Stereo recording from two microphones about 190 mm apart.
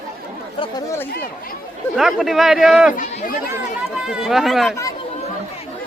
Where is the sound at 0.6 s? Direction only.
20° left (ahead or behind).